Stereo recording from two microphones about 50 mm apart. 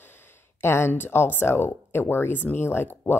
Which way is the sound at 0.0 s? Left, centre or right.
Left.